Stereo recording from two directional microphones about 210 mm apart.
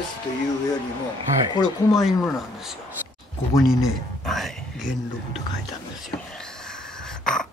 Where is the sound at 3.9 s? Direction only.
Centre (ahead or behind).